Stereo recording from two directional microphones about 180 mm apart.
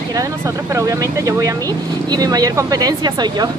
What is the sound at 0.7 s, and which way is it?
Speech, 20° right (ahead or behind).